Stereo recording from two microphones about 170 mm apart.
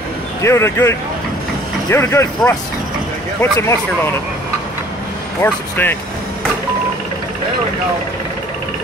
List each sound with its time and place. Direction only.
0.4 s speech: 15° left (ahead or behind)
5.4 s speech: 10° left (ahead or behind)